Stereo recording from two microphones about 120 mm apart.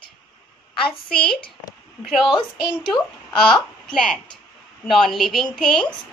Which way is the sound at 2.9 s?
5° left (ahead or behind).